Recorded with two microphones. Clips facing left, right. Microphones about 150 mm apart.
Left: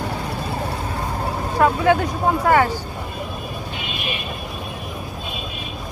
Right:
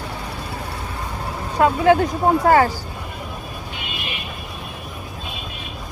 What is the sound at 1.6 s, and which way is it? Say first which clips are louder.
Speech: right 2 dB; 30° right (ahead or behind).